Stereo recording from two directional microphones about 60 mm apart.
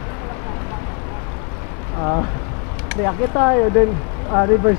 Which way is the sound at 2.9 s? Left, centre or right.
Centre.